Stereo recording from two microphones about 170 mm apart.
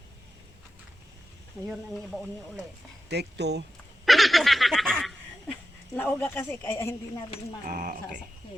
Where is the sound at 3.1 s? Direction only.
80° right.